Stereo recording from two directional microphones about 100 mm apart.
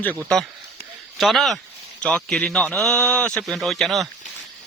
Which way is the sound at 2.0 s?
10° left (ahead or behind).